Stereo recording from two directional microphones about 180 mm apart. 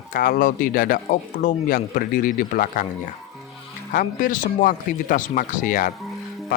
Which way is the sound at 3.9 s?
50° left (ahead or behind).